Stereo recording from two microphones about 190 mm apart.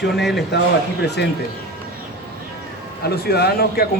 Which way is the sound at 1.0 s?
60° left (ahead or behind).